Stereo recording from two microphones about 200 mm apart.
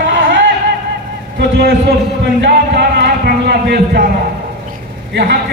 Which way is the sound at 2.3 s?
60° right (ahead or behind).